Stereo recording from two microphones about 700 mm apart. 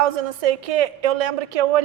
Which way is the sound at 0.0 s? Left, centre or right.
Right.